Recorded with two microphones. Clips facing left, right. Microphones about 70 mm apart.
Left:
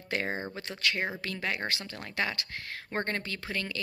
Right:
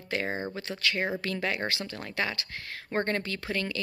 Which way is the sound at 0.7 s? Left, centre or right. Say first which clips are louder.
Right 2 dB; centre.